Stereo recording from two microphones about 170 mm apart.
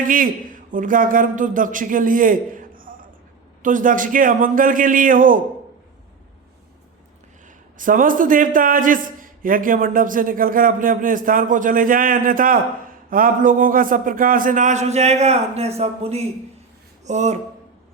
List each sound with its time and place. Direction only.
0.0 s a man's voice: 55° right (ahead or behind)
7.8 s a man's voice: 50° right (ahead or behind)